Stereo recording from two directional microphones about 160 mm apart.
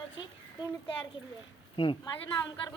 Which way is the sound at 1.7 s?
30° left (ahead or behind).